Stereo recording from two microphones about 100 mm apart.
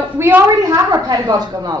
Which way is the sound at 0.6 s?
40° right (ahead or behind).